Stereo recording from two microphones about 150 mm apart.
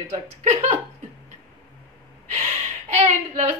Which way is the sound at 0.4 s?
50° right (ahead or behind).